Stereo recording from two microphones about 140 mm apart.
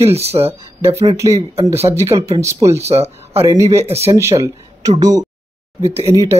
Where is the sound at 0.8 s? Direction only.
20° right (ahead or behind).